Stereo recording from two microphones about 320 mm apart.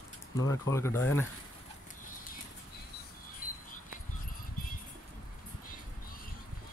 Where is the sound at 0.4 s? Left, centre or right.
Centre.